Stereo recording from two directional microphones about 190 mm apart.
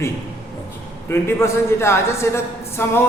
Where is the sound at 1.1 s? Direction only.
15° left (ahead or behind).